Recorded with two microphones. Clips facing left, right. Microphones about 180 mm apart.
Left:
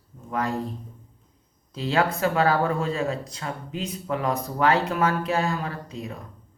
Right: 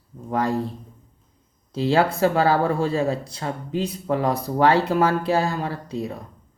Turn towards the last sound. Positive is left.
turn(degrees=-35)  # may be behind; listen again after turning